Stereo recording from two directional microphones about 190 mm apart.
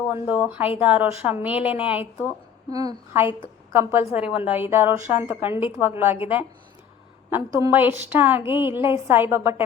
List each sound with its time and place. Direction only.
0.1 s a woman's voice: 5° right (ahead or behind)
2.6 s a woman's voice: 20° right (ahead or behind)
7.3 s a woman's voice: 15° right (ahead or behind)